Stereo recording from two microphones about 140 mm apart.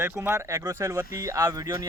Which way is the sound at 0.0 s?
20° right (ahead or behind).